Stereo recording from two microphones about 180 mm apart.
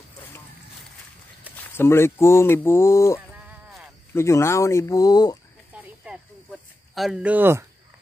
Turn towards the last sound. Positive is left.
turn(degrees=-10)  # may be behind; listen again after turning